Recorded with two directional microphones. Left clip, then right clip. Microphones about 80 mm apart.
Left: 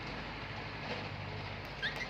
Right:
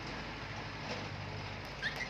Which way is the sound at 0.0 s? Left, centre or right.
Right.